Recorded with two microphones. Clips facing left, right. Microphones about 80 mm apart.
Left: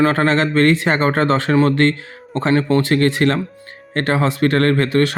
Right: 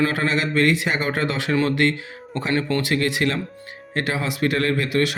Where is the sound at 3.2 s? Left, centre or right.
Left.